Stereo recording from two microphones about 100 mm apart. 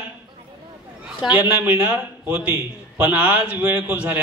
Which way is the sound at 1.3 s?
15° right (ahead or behind).